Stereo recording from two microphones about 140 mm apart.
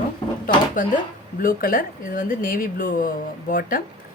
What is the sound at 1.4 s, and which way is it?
Speech, 90° left.